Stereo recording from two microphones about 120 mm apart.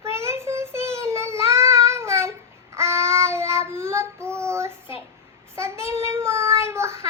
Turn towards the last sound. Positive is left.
turn(degrees=-25)  # may be behind; listen again after turning